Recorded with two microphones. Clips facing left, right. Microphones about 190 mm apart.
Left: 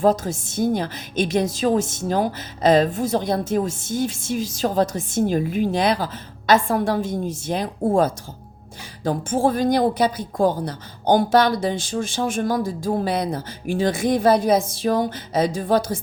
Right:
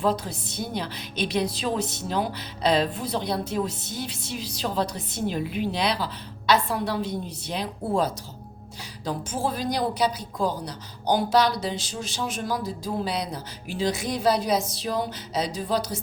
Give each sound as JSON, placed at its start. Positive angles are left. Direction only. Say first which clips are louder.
{"t": 0.0, "sound": "a woman's voice", "louder": "left 7 dB", "side_deg": 45}